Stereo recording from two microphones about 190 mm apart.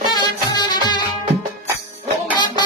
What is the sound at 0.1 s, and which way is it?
Music, 20° left (ahead or behind).